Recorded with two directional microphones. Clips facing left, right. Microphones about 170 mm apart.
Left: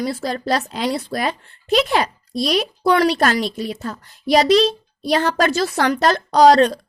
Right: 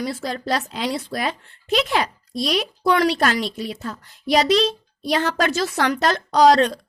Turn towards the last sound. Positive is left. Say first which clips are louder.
# left 3 dB
turn(degrees=35)  # may be behind; listen again after turning